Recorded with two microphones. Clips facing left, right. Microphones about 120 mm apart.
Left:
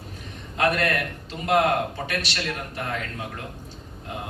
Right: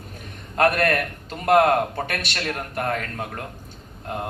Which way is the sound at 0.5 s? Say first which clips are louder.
Right 4 dB; 50° right (ahead or behind).